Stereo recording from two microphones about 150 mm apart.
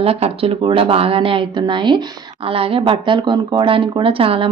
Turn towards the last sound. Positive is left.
turn(degrees=-35)  # may be behind; listen again after turning